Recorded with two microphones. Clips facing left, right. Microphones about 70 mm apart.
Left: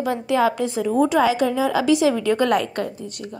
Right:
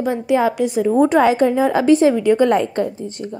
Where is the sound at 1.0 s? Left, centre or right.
Right.